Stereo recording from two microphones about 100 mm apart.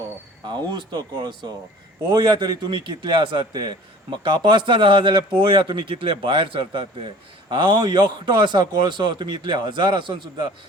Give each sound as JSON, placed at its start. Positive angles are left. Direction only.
{"t": 0.8, "sound": "a man's voice", "side_deg": -45}